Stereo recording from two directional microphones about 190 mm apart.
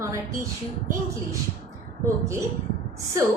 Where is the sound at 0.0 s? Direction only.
15° right (ahead or behind).